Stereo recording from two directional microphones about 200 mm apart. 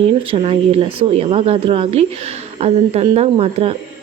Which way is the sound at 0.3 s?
30° right (ahead or behind).